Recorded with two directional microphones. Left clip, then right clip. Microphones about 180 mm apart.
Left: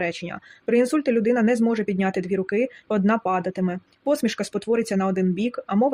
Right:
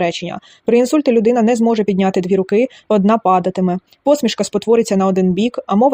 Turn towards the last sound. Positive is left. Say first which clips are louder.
# right 9 dB
turn(degrees=-30)  # may be behind; listen again after turning